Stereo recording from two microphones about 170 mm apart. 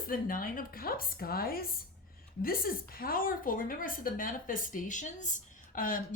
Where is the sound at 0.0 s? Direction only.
55° left (ahead or behind).